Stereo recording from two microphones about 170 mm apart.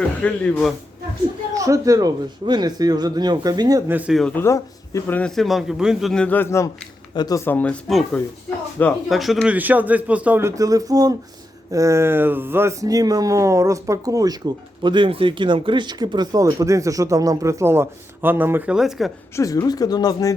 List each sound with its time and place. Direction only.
0.2 s speech: 5° left (ahead or behind)
1.5 s speech: 20° right (ahead or behind)
4.2 s speech: 5° left (ahead or behind)
4.4 s a man's voice: 15° left (ahead or behind); by 19.1 s centre (ahead or behind)
19.4 s speech: 20° left (ahead or behind)